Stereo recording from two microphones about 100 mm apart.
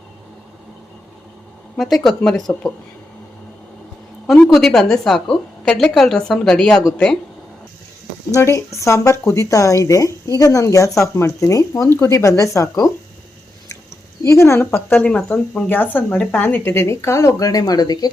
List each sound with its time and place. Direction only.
1.8 s a woman's voice: 5° left (ahead or behind)
4.4 s a woman's voice: centre (ahead or behind)
8.3 s speech: 30° left (ahead or behind)
14.3 s speech: 30° left (ahead or behind)